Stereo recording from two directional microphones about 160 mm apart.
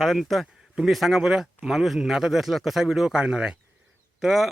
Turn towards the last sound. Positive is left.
turn(degrees=-5)  # may be behind; listen again after turning